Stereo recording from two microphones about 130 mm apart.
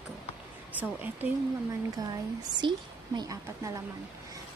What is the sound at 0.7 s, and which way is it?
Speech, 10° right (ahead or behind).